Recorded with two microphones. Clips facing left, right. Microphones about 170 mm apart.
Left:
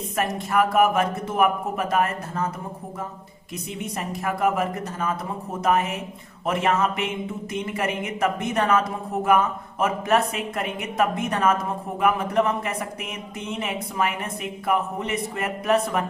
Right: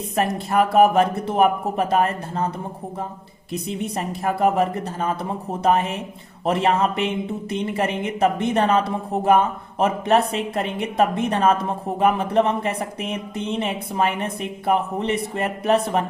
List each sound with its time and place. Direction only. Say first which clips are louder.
0.2 s speech: right 3 dB; 30° right (ahead or behind)
3.5 s a woman's voice: right 5 dB; 30° right (ahead or behind)